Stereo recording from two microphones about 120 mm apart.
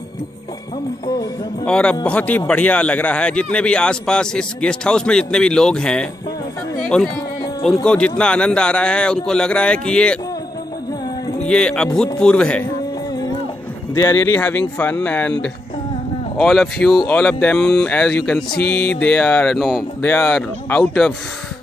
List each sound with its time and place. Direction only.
1.7 s speech: 10° left (ahead or behind)
7.8 s speech: 10° left (ahead or behind)
11.4 s speech: 10° left (ahead or behind)
13.9 s speech: 20° left (ahead or behind); by 19.8 s centre (ahead or behind)
20.0 s speech: 15° left (ahead or behind)